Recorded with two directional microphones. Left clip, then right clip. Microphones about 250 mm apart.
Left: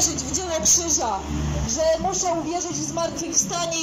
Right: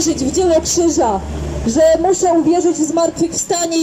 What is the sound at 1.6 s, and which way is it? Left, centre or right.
A woman's voice, right.